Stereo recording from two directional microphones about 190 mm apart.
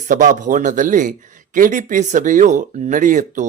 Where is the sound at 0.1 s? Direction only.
45° right (ahead or behind).